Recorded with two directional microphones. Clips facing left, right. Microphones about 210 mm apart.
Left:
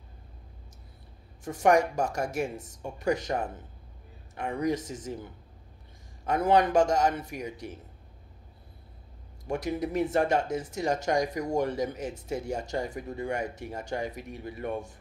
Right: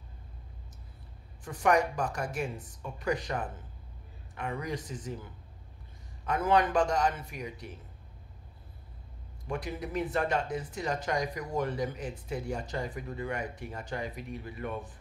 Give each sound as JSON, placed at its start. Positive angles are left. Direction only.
{"t": 1.4, "sound": "speech", "side_deg": 45}
{"t": 6.2, "sound": "speech", "side_deg": 45}
{"t": 9.5, "sound": "speech", "side_deg": 45}